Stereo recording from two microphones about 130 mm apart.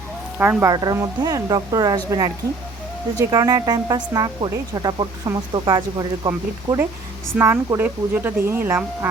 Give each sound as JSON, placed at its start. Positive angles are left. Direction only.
{"t": 0.6, "sound": "speech", "side_deg": -30}
{"t": 3.3, "sound": "speech", "side_deg": -30}
{"t": 7.3, "sound": "speech", "side_deg": -15}